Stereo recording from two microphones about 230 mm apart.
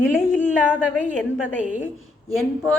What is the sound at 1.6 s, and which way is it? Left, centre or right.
A woman's voice, centre.